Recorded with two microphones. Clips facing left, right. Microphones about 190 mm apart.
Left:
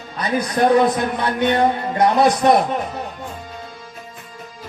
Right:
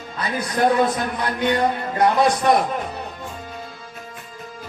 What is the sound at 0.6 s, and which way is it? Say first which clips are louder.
Speech: left 2 dB; 20° left (ahead or behind).